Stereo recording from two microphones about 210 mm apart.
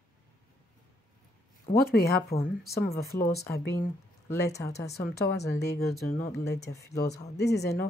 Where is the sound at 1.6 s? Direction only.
45° left (ahead or behind).